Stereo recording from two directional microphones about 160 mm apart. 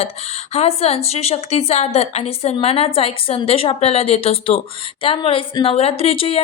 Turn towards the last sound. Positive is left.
turn(degrees=35)  # may be behind; listen again after turning